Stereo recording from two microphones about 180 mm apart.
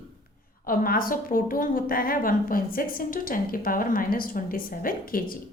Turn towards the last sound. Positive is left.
turn(degrees=50)  # may be behind; listen again after turning